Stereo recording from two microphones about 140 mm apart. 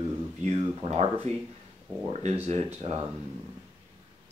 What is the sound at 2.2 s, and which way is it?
Speech, 50° right (ahead or behind).